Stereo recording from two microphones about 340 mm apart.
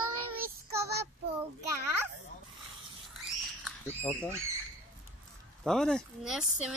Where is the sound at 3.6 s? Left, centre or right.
Centre.